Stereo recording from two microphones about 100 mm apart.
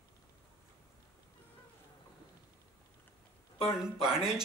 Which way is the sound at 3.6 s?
5° right (ahead or behind).